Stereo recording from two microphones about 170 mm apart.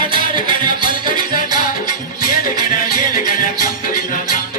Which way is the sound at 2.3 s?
55° left (ahead or behind).